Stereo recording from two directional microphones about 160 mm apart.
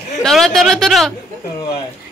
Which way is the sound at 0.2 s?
5° left (ahead or behind).